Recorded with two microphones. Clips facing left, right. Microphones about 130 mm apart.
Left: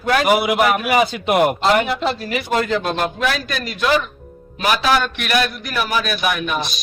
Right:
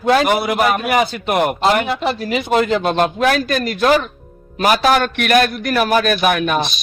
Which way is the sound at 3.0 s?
45° right (ahead or behind).